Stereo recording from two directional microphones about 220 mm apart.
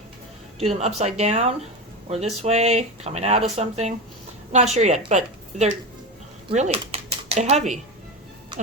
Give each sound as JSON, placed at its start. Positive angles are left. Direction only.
{"t": 0.6, "sound": "a woman's voice", "side_deg": -30}